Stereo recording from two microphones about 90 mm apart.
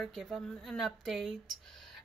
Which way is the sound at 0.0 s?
Centre (ahead or behind).